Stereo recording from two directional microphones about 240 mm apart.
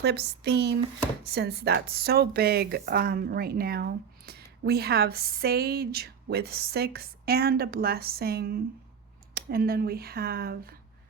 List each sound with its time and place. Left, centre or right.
0.0 s speech: right